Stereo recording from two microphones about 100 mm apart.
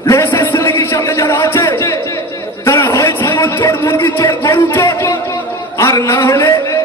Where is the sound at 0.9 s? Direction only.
35° left (ahead or behind).